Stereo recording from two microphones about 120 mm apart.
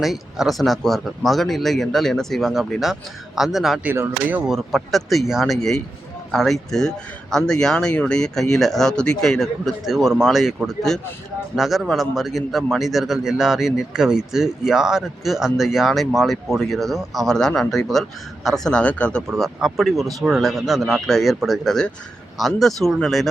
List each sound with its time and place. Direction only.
0.0 s a man's voice: centre (ahead or behind)
3.8 s speech: 15° right (ahead or behind)
4.4 s a man's voice: centre (ahead or behind)
19.4 s a man's voice: 5° right (ahead or behind)